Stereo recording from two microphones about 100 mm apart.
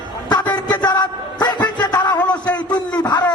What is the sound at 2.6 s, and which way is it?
Speech, 45° left (ahead or behind).